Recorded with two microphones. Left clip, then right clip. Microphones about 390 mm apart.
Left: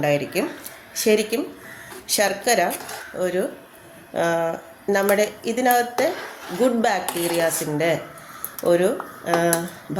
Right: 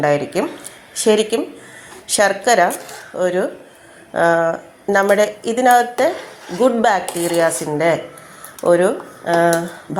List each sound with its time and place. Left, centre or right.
0.0 s a woman's voice: left